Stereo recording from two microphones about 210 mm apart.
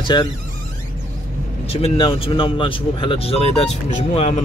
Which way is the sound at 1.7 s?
25° left (ahead or behind).